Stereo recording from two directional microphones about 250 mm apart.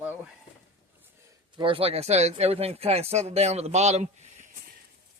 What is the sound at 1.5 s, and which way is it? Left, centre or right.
Speech, right.